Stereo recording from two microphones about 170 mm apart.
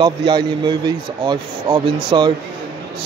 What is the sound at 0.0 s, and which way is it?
Speech, 25° right (ahead or behind).